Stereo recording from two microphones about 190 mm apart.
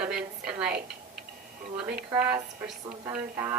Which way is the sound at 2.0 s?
10° right (ahead or behind).